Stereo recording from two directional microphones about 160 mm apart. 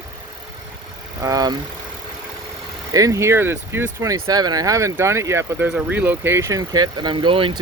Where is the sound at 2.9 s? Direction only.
20° right (ahead or behind).